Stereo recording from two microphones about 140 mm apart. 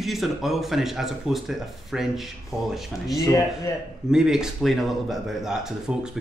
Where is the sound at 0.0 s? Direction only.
Centre (ahead or behind).